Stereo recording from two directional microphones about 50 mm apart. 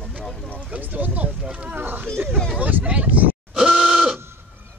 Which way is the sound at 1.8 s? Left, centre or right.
Right.